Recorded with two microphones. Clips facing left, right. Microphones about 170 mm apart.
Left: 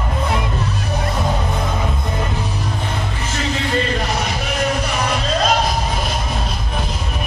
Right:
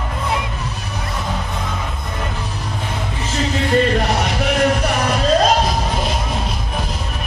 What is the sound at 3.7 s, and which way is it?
Music, 65° right (ahead or behind).